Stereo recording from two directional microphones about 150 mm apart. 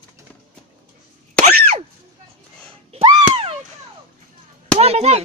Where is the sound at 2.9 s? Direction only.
35° right (ahead or behind).